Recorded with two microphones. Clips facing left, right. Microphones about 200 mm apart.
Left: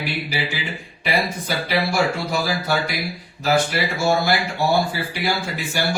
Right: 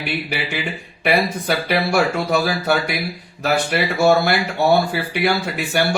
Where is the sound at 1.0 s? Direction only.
60° right (ahead or behind).